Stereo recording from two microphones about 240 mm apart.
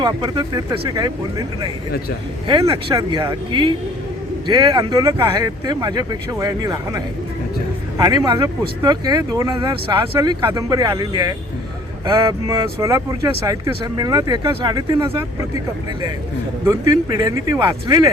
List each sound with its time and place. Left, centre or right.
0.0 s speech: centre